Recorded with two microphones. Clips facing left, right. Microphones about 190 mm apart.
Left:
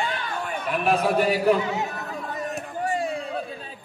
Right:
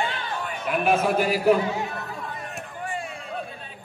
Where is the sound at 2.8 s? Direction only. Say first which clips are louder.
Left 7 dB; 35° left (ahead or behind).